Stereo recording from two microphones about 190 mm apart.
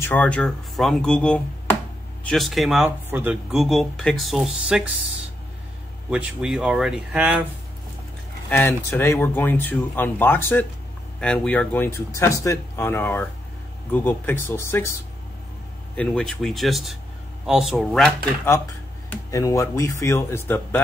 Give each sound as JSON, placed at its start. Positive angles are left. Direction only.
{"t": 0.0, "sound": "speech", "side_deg": 10}
{"t": 6.0, "sound": "speech", "side_deg": -5}
{"t": 8.5, "sound": "speech", "side_deg": 10}
{"t": 16.0, "sound": "speech", "side_deg": 5}
{"t": 19.0, "sound": "speech", "side_deg": 15}